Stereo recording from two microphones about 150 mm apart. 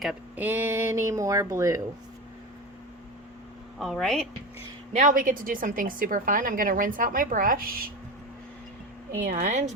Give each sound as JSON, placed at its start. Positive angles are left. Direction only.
{"t": 0.0, "sound": "speech", "side_deg": -10}
{"t": 3.8, "sound": "a woman's voice", "side_deg": 0}
{"t": 4.9, "sound": "a woman's voice", "side_deg": -60}
{"t": 9.2, "sound": "speech", "side_deg": -55}